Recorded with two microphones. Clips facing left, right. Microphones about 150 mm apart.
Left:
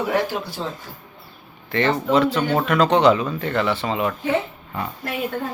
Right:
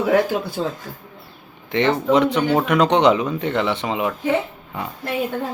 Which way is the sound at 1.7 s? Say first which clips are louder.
Right 2 dB; 15° right (ahead or behind).